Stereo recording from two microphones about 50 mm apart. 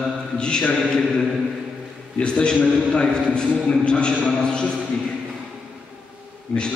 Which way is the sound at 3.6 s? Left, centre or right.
Centre.